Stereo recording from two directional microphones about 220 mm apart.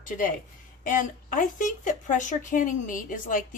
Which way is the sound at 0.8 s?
35° left (ahead or behind).